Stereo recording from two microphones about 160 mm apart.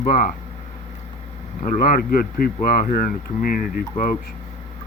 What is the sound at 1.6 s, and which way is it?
Speech, 60° left (ahead or behind).